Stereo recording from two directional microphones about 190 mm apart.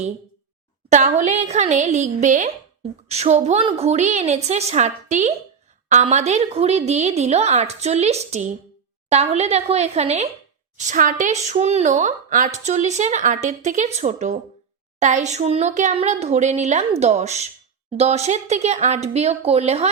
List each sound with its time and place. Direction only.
0.9 s a woman's voice: 40° right (ahead or behind)